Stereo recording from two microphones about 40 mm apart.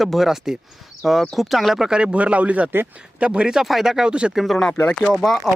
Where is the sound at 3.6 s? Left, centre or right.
Centre.